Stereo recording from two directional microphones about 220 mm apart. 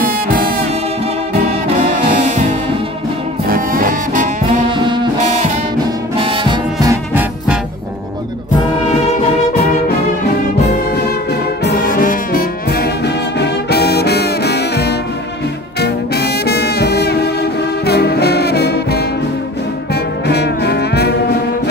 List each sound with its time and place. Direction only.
0.0 s music: 40° right (ahead or behind)
1.8 s brass instrument: 35° right (ahead or behind)
4.6 s brass instrument: 20° right (ahead or behind)
11.9 s brass instrument: 40° left (ahead or behind)
15.8 s music: 45° left (ahead or behind)
19.9 s brass instrument: 50° left (ahead or behind)